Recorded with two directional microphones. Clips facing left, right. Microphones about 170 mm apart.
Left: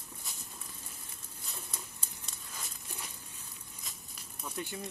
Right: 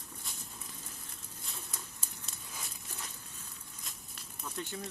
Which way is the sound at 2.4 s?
10° right (ahead or behind).